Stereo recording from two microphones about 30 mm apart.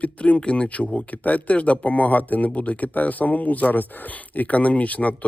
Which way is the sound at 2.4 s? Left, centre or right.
Left.